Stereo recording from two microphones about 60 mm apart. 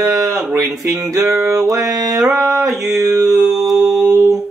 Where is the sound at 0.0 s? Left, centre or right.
Right.